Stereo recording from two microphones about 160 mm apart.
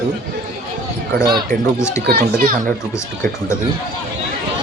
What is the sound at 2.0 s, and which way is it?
Speech, 80° right.